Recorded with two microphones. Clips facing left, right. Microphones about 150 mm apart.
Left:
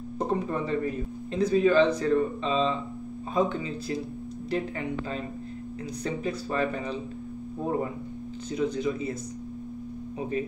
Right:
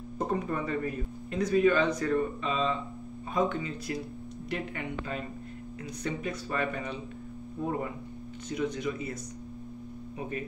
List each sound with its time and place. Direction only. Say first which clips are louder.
0.3 s speech: left 3 dB; 30° left (ahead or behind)
8.5 s speech: left 4 dB; 30° left (ahead or behind)